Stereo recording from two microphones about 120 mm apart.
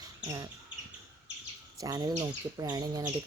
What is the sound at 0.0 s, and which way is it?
Bird, 30° right (ahead or behind).